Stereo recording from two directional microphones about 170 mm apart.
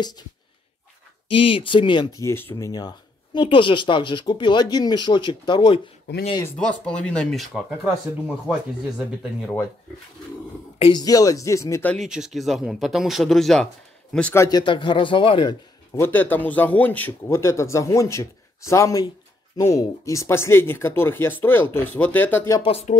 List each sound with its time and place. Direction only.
1.3 s speech: 35° left (ahead or behind)
6.4 s speech: 10° left (ahead or behind)
10.8 s speech: 25° left (ahead or behind)
11.9 s speech: centre (ahead or behind); by 14.6 s 15° left (ahead or behind)
14.6 s speech: 30° left (ahead or behind)
15.9 s speech: 15° left (ahead or behind)
22.7 s speech: 40° left (ahead or behind)